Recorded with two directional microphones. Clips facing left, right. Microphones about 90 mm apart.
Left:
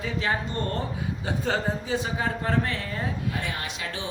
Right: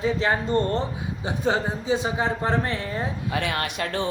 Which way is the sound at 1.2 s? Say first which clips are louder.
Right 3 dB; 20° right (ahead or behind).